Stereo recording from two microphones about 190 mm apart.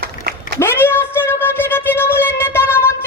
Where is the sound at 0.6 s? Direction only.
10° left (ahead or behind).